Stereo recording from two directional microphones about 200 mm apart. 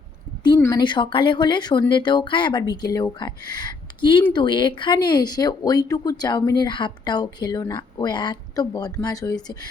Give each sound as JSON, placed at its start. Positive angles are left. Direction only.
{"t": 0.4, "sound": "speech", "side_deg": 20}